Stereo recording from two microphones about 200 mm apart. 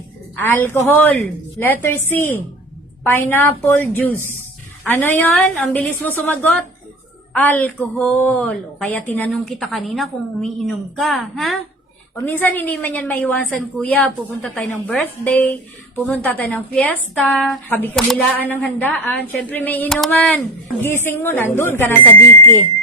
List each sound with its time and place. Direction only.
0.5 s a woman's voice: 10° left (ahead or behind)